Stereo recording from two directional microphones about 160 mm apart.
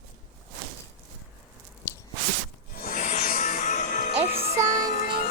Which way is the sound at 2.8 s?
55° left (ahead or behind).